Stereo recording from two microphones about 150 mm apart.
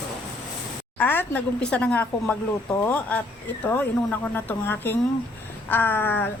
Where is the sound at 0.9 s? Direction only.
15° left (ahead or behind).